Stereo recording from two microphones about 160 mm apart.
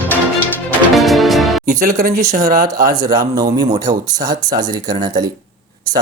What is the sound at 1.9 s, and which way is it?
Speech, 65° right (ahead or behind).